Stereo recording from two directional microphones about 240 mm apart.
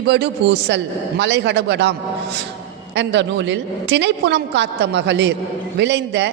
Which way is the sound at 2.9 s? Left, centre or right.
Right.